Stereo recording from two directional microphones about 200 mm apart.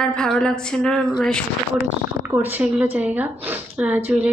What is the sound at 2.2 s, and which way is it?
A woman's voice, 10° right (ahead or behind).